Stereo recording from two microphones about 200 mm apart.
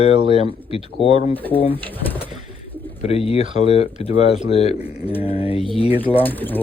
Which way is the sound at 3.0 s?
30° left (ahead or behind).